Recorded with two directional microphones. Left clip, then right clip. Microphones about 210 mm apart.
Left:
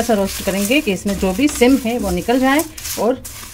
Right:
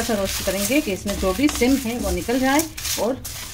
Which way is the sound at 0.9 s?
40° left (ahead or behind).